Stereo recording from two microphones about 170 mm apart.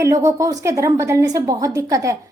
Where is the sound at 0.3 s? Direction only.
20° right (ahead or behind).